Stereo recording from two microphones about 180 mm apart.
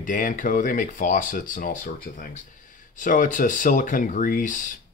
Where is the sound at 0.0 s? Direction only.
50° left (ahead or behind).